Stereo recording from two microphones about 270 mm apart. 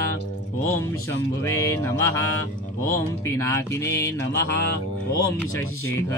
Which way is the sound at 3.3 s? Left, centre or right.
Centre.